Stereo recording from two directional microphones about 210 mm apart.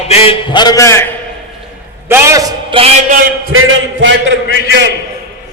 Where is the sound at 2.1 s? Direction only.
10° right (ahead or behind).